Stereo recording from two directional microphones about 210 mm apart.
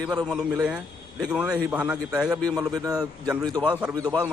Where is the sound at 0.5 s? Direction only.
5° right (ahead or behind).